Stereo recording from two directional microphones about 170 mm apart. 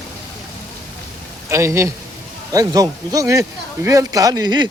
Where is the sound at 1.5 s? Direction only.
15° right (ahead or behind).